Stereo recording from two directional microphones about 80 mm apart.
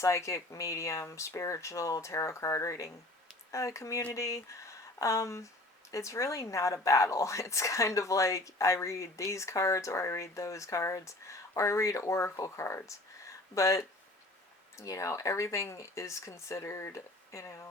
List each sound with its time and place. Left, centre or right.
0.0 s speech: left